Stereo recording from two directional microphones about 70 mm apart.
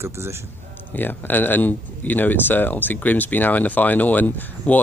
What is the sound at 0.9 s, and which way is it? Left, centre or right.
Speech, left.